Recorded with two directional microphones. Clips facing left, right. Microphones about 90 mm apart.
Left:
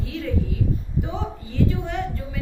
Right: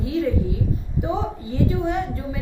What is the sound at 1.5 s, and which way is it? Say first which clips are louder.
Speech: right 2 dB; 15° right (ahead or behind).